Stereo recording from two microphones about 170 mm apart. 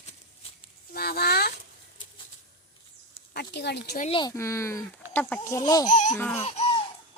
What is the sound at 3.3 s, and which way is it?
Speech, 75° left (ahead or behind).